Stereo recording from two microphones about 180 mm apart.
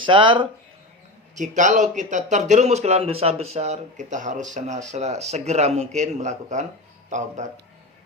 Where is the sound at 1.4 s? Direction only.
45° right (ahead or behind).